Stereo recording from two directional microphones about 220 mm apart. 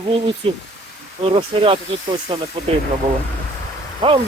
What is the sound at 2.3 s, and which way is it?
Speech, 25° right (ahead or behind).